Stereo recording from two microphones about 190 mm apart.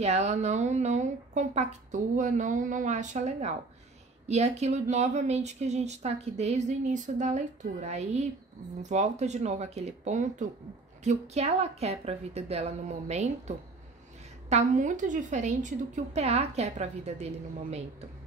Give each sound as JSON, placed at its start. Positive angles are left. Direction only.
{"t": 0.0, "sound": "a woman's voice", "side_deg": -35}